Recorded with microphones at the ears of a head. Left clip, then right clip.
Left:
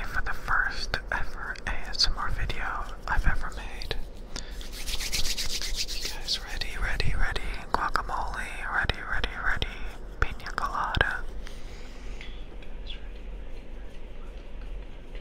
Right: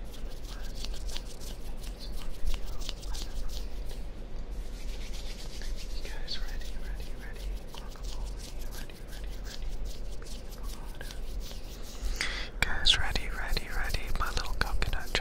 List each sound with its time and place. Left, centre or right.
0.0 s whispering: left
4.8 s rub: left
10.1 s whispering: left
12.2 s whispering: right